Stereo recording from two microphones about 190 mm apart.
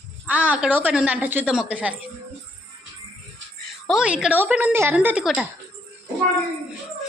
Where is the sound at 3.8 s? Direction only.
5° right (ahead or behind).